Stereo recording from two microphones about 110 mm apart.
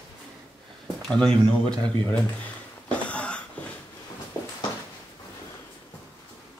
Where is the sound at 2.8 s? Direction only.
10° left (ahead or behind).